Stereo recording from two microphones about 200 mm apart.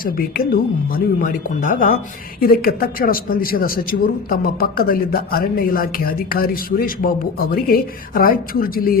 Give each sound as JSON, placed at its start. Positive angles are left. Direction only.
{"t": 0.0, "sound": "a man's voice", "side_deg": 45}